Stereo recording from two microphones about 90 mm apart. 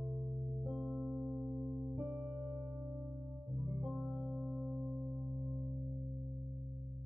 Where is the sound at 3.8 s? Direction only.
5° left (ahead or behind).